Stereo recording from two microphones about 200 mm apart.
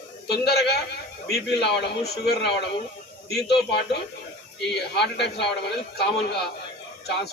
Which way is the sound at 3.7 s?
55° left (ahead or behind).